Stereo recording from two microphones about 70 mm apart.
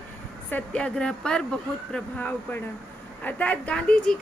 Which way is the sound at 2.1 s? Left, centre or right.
Left.